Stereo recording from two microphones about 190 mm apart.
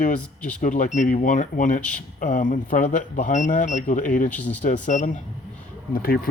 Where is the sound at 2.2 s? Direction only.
45° left (ahead or behind).